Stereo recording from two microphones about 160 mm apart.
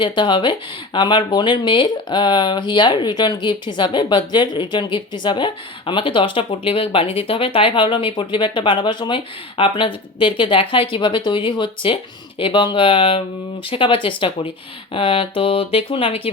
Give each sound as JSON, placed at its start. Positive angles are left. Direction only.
{"t": 0.0, "sound": "speech", "side_deg": 30}